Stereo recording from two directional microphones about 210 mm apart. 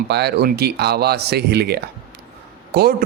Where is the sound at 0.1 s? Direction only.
50° right (ahead or behind).